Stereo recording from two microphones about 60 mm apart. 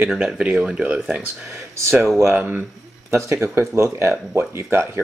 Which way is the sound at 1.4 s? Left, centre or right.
Right.